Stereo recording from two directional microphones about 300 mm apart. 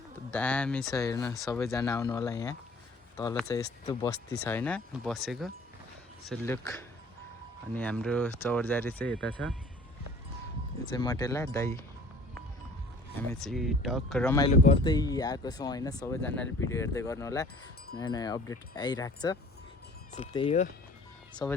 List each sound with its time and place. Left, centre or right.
0.3 s speech: centre
10.9 s speech: centre
13.2 s speech: centre
14.5 s speech: left
14.8 s speech: centre